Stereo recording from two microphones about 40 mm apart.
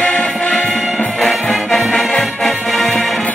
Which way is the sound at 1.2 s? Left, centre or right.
Centre.